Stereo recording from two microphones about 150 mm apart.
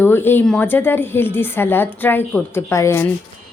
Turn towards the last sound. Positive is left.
turn(degrees=15)  # may be behind; listen again after turning